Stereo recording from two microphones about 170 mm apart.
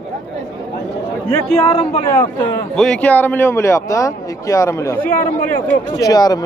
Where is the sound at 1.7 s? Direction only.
40° left (ahead or behind).